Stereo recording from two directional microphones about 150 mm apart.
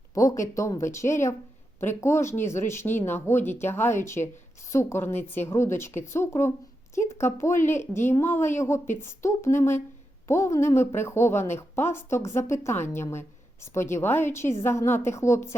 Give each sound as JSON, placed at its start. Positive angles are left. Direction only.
{"t": 0.1, "sound": "speech", "side_deg": 20}